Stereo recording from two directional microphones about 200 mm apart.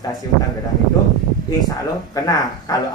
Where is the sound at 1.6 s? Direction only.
20° left (ahead or behind).